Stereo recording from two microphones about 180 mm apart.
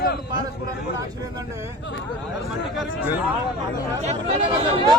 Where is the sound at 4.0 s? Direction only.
35° right (ahead or behind).